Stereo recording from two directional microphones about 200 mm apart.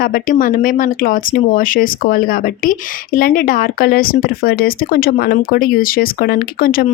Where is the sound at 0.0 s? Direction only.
45° left (ahead or behind).